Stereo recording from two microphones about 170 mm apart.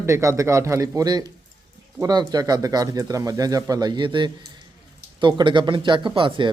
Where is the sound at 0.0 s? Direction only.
15° right (ahead or behind).